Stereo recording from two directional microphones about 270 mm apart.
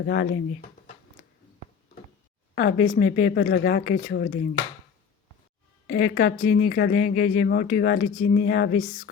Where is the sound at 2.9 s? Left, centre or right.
Left.